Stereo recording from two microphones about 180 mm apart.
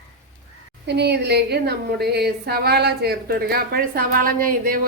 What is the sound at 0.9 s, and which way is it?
A woman's voice, 70° right (ahead or behind).